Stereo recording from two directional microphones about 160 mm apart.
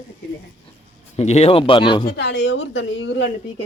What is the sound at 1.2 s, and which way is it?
Speech, 45° left (ahead or behind).